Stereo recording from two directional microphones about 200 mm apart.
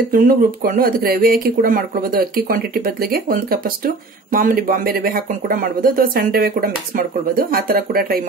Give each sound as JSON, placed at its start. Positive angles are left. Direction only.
{"t": 0.1, "sound": "speech", "side_deg": -45}